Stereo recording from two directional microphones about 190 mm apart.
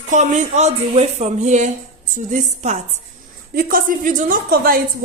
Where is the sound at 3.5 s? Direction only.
45° right (ahead or behind).